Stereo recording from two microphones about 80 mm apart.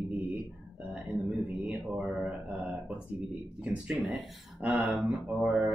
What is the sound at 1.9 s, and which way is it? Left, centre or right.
Speech, centre.